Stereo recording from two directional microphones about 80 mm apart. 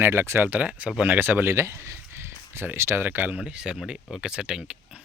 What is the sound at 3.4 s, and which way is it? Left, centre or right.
Speech, centre.